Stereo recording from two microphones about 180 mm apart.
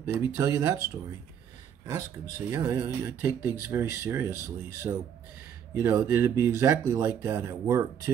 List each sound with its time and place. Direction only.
0.0 s speech: 15° right (ahead or behind)
2.5 s speech: 20° right (ahead or behind)